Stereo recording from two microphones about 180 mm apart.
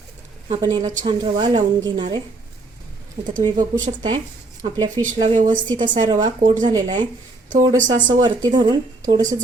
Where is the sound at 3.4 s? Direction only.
25° right (ahead or behind).